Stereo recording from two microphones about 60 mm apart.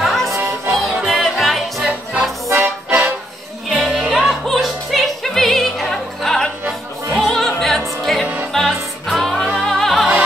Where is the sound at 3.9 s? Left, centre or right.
Centre.